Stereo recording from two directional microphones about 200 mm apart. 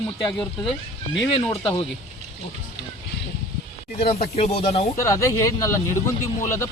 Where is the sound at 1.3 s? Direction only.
25° left (ahead or behind).